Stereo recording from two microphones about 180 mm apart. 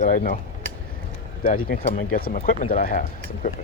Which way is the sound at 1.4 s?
50° left (ahead or behind).